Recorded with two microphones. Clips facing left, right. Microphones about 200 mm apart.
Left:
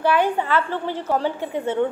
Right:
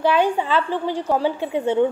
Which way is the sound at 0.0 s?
15° right (ahead or behind).